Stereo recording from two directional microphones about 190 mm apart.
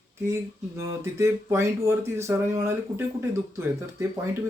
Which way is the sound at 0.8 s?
15° right (ahead or behind).